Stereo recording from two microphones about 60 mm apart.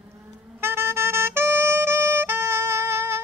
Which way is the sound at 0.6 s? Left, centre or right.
Right.